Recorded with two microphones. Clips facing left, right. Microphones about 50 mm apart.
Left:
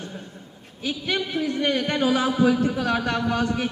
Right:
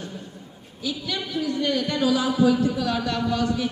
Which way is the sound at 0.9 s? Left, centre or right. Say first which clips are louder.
Left 3 dB; left.